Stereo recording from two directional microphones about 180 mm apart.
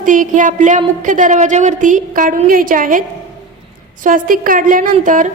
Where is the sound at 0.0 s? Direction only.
45° right (ahead or behind).